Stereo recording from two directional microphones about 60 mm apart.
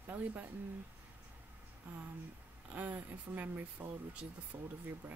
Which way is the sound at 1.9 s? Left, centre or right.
Right.